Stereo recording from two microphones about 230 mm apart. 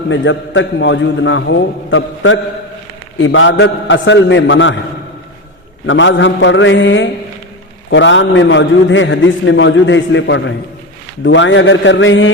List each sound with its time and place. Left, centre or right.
0.1 s a man's voice: left
5.8 s a man's voice: left